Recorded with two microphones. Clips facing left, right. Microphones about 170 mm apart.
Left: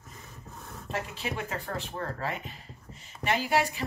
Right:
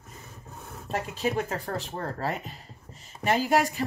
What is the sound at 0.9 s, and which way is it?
A woman's voice, 40° right (ahead or behind).